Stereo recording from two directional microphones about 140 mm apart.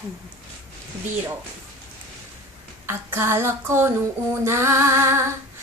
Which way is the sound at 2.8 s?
15° right (ahead or behind).